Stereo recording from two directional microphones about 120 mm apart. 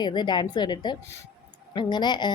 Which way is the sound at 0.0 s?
40° left (ahead or behind).